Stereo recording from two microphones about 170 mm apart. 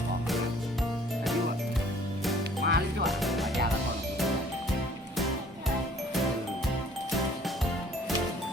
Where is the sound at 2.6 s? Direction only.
70° right (ahead or behind).